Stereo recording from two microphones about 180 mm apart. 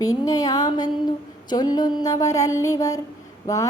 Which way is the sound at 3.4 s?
15° left (ahead or behind).